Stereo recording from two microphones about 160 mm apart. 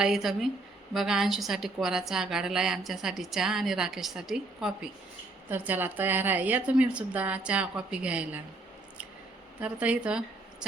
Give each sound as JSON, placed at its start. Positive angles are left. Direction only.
{"t": 0.0, "sound": "a woman's voice", "side_deg": 0}
{"t": 9.6, "sound": "a woman's voice", "side_deg": -10}